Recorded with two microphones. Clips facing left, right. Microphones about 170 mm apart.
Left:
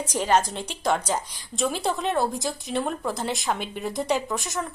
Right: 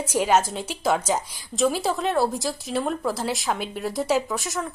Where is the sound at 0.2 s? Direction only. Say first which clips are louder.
Right 2 dB; 10° right (ahead or behind).